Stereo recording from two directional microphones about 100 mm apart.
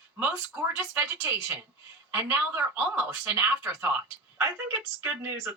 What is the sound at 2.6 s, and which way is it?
A woman's voice, 15° right (ahead or behind).